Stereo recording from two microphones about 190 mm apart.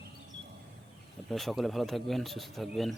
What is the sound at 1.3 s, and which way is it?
Speech, centre (ahead or behind).